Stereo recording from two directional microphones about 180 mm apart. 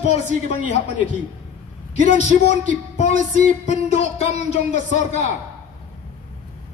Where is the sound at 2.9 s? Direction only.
40° left (ahead or behind).